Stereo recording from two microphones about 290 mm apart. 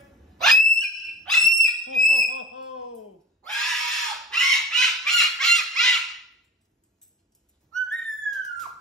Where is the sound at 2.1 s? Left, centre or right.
Left.